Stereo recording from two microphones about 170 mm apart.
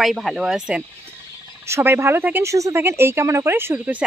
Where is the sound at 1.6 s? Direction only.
15° right (ahead or behind).